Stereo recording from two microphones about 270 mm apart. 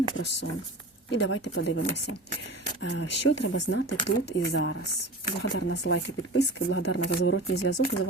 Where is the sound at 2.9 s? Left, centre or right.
Left.